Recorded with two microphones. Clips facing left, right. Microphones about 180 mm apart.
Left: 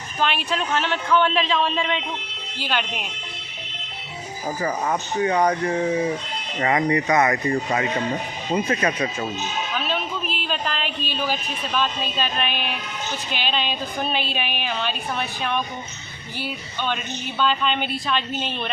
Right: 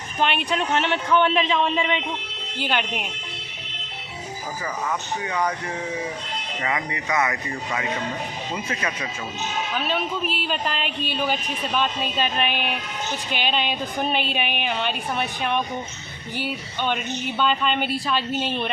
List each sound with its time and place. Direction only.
0.2 s speech: 15° right (ahead or behind)
4.6 s speech: 35° left (ahead or behind)
9.7 s speech: 15° right (ahead or behind)